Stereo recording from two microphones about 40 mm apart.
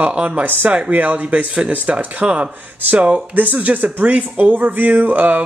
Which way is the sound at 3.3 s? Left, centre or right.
Right.